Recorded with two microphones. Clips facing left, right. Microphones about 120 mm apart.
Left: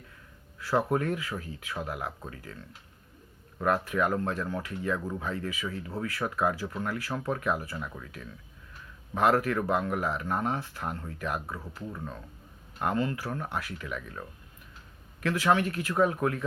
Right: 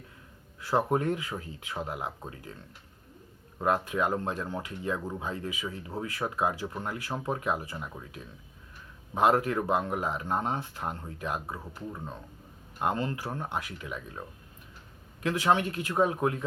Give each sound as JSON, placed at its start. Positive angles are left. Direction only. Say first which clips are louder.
{"t": 0.6, "sound": "speech", "louder": "even", "side_deg": -20}
{"t": 3.6, "sound": "speech", "louder": "even", "side_deg": -20}